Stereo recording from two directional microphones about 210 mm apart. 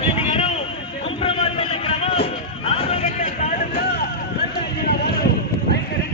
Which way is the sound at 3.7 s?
50° left (ahead or behind).